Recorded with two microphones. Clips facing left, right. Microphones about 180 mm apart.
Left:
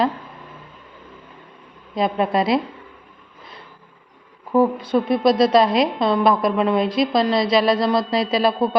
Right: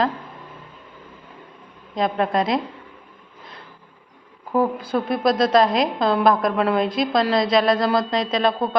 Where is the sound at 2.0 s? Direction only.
5° left (ahead or behind).